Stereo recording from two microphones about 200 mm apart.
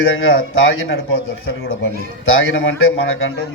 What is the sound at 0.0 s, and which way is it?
A man's voice, 85° left.